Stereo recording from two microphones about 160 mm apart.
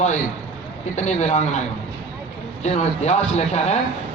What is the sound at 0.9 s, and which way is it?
Speech, 45° left (ahead or behind).